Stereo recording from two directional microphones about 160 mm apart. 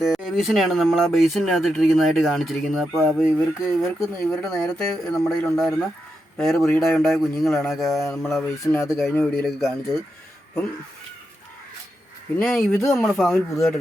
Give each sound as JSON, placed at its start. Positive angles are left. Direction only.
{"t": 0.0, "sound": "speech", "side_deg": 0}
{"t": 8.6, "sound": "speech", "side_deg": 15}
{"t": 8.9, "sound": "speech", "side_deg": 0}
{"t": 12.4, "sound": "speech", "side_deg": 5}